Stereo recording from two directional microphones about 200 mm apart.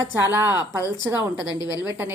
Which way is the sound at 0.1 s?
10° right (ahead or behind).